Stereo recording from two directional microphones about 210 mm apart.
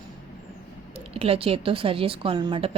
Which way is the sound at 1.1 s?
25° right (ahead or behind).